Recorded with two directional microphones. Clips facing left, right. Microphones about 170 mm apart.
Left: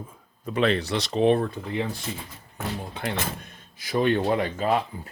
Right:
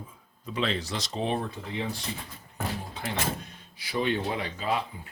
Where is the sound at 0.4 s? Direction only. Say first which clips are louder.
Left 7 dB; 55° left (ahead or behind).